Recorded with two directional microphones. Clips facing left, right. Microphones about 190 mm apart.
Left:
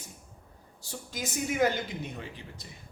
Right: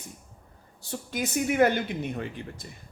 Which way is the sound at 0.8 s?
60° right (ahead or behind).